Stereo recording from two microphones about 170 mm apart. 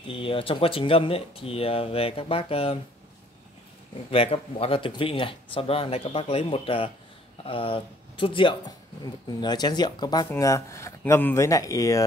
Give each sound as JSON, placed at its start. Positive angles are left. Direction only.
{"t": 0.1, "sound": "speech", "side_deg": 30}
{"t": 4.1, "sound": "speech", "side_deg": 35}